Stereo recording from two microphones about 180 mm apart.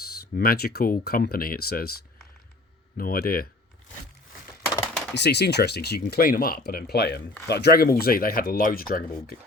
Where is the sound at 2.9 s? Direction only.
55° left (ahead or behind).